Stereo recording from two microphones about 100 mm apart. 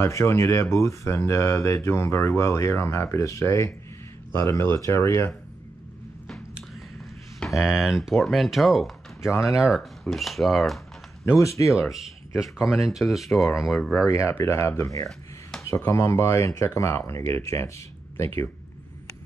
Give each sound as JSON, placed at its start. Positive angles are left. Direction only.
{"t": 0.0, "sound": "speech", "side_deg": 25}
{"t": 7.3, "sound": "speech", "side_deg": 0}
{"t": 11.2, "sound": "speech", "side_deg": 30}
{"t": 11.7, "sound": "speech", "side_deg": 0}
{"t": 13.9, "sound": "speech", "side_deg": 30}